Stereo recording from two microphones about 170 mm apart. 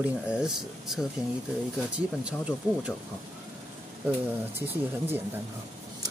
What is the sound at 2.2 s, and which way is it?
Speech, 5° right (ahead or behind).